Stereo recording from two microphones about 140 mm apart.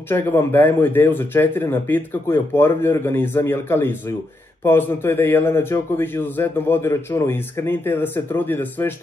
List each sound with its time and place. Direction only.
0.1 s a man's voice: 15° left (ahead or behind)